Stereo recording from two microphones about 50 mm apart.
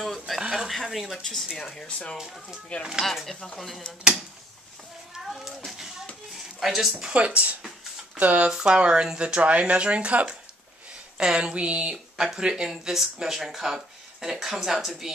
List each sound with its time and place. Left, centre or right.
0.0 s speech: centre
0.4 s speech: centre
1.8 s speech: left
2.8 s speech: centre
3.1 s speech: centre
4.1 s speech: centre
5.7 s speech: centre
6.3 s a sound: centre
7.2 s speech: right
8.5 s speech: centre